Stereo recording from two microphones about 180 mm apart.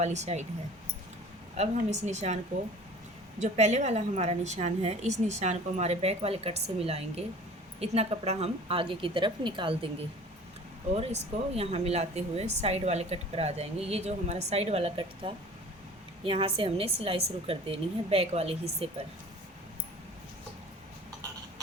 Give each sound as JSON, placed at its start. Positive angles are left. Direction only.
{"t": 0.0, "sound": "a woman's voice", "side_deg": -40}
{"t": 1.5, "sound": "a woman's voice", "side_deg": -40}
{"t": 10.9, "sound": "a woman's voice", "side_deg": -35}